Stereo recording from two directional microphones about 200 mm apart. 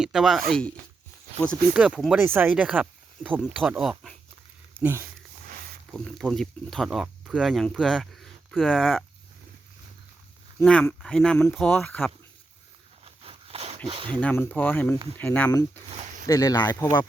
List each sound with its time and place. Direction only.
0.0 s speech: centre (ahead or behind)
1.7 s speech: 5° right (ahead or behind)
5.9 s speech: centre (ahead or behind)
10.6 s speech: 5° left (ahead or behind)
13.1 s a sound: 30° right (ahead or behind)
14.1 s speech: 5° left (ahead or behind)